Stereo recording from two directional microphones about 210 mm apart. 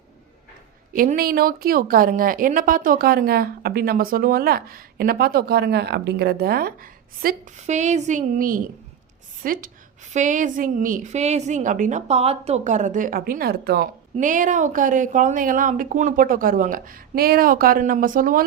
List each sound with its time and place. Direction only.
0.9 s a woman's voice: 45° right (ahead or behind)